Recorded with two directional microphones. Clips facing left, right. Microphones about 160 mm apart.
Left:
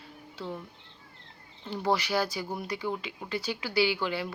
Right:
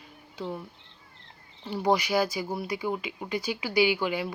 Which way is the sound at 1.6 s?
15° right (ahead or behind).